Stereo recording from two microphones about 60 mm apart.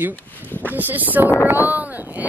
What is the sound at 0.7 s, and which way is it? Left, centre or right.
Speech, right.